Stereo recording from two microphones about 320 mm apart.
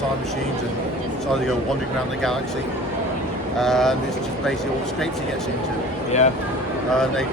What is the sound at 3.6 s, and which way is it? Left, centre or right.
Speech, centre.